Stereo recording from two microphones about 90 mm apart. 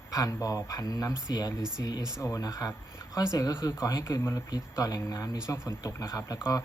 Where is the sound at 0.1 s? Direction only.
40° left (ahead or behind).